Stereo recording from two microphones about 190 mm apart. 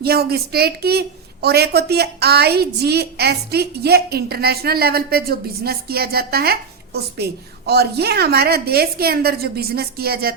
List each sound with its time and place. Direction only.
0.0 s a woman's voice: 55° right (ahead or behind)